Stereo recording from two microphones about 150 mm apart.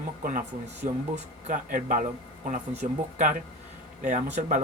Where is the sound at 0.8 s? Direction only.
55° right (ahead or behind).